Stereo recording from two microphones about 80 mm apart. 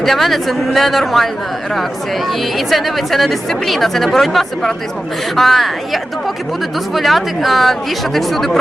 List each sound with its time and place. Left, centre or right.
0.0 s speech: centre